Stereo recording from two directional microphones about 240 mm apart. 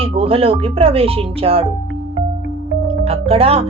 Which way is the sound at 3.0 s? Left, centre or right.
Right.